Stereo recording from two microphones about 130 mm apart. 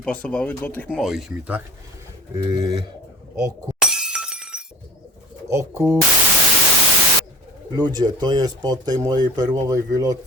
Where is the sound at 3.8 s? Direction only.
5° right (ahead or behind).